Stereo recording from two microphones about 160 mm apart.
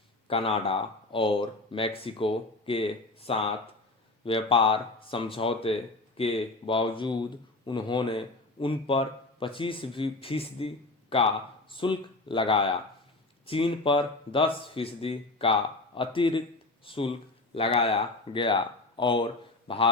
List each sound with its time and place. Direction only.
0.3 s speech: 35° left (ahead or behind)